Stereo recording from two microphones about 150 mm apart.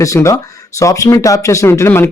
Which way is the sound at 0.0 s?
20° left (ahead or behind).